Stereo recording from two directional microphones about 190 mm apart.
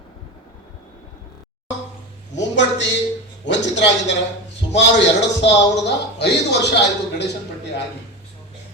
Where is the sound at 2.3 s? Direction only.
70° left (ahead or behind).